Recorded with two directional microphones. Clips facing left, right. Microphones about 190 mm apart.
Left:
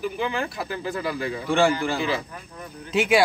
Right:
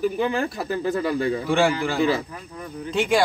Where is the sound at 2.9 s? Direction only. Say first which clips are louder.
Left 1 dB; 5° left (ahead or behind).